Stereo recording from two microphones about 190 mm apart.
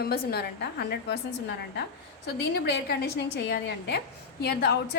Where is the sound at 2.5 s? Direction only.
60° left (ahead or behind).